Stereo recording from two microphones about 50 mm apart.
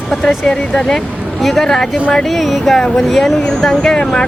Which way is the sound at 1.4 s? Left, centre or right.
Centre.